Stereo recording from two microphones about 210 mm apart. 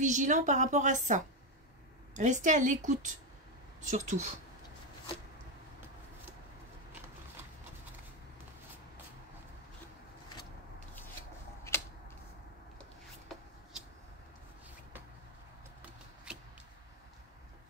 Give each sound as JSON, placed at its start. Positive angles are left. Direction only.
{"t": 0.0, "sound": "a woman's voice", "side_deg": -35}
{"t": 11.7, "sound": "a sound", "side_deg": 10}
{"t": 16.3, "sound": "shuffling cards", "side_deg": -5}